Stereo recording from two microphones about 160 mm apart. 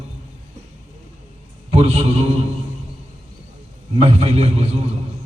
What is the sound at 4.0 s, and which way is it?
Speech, 35° right (ahead or behind).